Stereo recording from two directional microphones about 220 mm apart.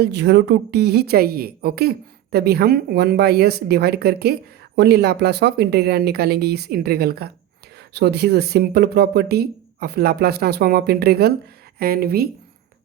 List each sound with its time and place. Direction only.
0.0 s a woman's voice: 50° right (ahead or behind)